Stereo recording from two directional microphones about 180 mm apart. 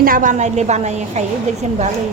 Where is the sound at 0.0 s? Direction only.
50° right (ahead or behind).